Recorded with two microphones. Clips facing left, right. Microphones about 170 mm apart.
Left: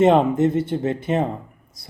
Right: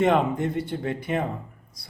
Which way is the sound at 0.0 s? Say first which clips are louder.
Left 6 dB; 25° left (ahead or behind).